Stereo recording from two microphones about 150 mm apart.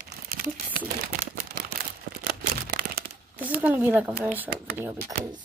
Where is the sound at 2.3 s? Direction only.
80° right.